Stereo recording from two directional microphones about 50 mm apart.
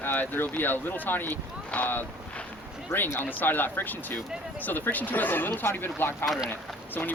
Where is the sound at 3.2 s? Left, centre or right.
Left.